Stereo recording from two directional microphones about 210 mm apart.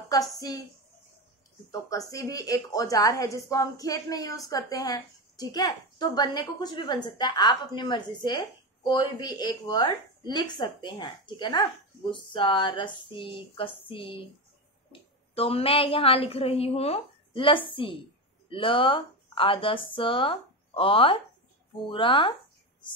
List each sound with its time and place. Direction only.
0.1 s speech: 15° left (ahead or behind)
1.7 s a woman's voice: 15° left (ahead or behind)